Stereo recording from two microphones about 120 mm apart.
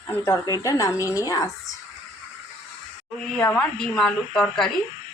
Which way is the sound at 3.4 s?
10° left (ahead or behind).